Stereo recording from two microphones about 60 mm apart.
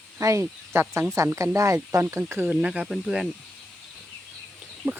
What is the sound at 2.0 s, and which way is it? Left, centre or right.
Speech, right.